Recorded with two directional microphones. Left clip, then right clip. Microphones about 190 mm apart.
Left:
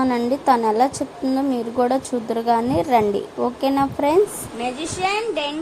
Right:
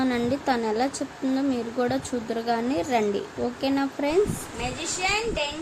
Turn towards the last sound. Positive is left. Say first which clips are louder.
# left 4 dB
turn(degrees=35)  # may be behind; listen again after turning